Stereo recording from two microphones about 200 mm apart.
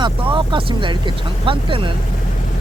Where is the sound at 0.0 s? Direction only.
25° right (ahead or behind).